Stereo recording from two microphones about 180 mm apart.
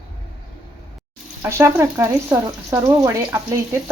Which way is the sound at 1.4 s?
15° right (ahead or behind).